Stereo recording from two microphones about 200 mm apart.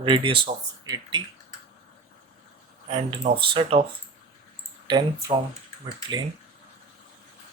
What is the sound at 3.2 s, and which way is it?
Speech, 25° right (ahead or behind).